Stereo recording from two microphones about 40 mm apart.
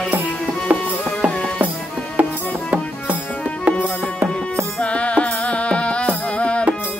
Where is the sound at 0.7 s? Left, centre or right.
Right.